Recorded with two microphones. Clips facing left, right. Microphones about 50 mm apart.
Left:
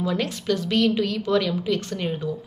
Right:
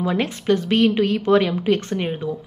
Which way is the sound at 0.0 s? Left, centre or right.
Right.